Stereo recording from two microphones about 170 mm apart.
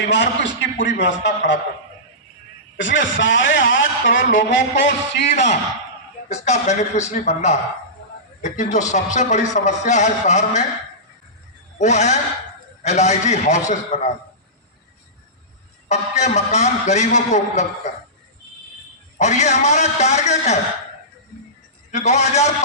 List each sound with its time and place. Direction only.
0.1 s a man's voice: 90° left
2.7 s a man's voice: 90° left
5.3 s a man's voice: 40° left (ahead or behind)
11.8 s a man's voice: 45° left (ahead or behind)
15.9 s a man's voice: 40° left (ahead or behind)
19.2 s a man's voice: 40° left (ahead or behind)
21.9 s a man's voice: 40° left (ahead or behind)